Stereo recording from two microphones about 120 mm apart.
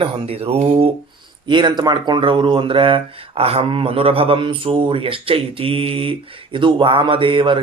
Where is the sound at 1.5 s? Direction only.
40° right (ahead or behind).